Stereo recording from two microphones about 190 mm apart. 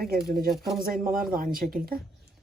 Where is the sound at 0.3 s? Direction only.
50° right (ahead or behind).